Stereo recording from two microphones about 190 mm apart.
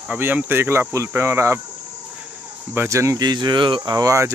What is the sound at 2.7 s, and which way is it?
Speech, 15° right (ahead or behind).